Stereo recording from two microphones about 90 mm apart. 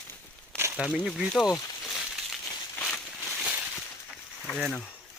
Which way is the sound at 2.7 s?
15° left (ahead or behind).